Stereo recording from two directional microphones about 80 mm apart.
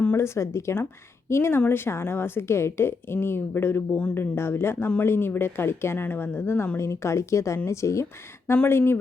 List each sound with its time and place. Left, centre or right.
0.2 s a woman's voice: left